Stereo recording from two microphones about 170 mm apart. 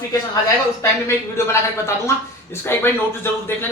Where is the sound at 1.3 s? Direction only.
15° left (ahead or behind).